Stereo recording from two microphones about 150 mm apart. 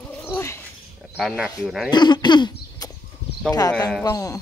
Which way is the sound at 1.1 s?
5° right (ahead or behind).